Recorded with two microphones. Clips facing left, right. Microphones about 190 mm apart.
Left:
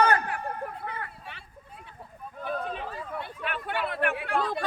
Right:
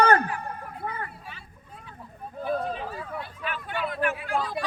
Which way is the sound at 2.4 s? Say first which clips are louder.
Right 4 dB; 35° right (ahead or behind).